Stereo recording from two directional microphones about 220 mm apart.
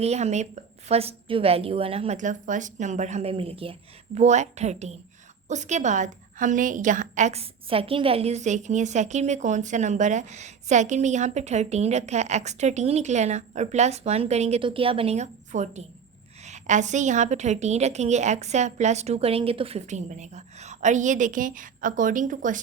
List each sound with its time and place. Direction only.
0.0 s a woman's voice: 30° right (ahead or behind)